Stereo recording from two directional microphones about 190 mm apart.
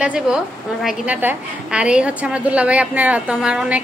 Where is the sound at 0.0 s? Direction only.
5° right (ahead or behind).